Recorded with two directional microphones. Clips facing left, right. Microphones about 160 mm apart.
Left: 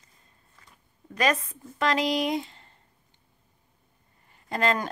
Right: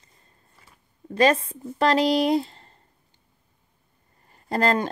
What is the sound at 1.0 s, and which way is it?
Speech, 30° right (ahead or behind).